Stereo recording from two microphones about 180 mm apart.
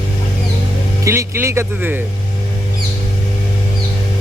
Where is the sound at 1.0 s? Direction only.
15° right (ahead or behind).